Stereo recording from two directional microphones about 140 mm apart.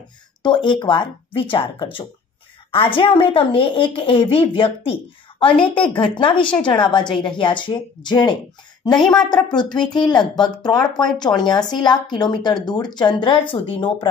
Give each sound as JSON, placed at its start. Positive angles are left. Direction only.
{"t": 0.4, "sound": "speech", "side_deg": 35}
{"t": 8.9, "sound": "a woman's voice", "side_deg": 5}
{"t": 9.3, "sound": "speech", "side_deg": 30}